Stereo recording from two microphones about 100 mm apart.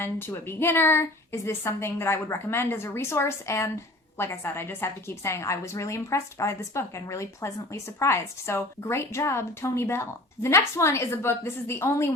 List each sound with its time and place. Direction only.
0.0 s a woman's voice: 25° left (ahead or behind)